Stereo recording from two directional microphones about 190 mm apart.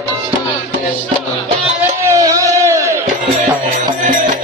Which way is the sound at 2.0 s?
15° right (ahead or behind).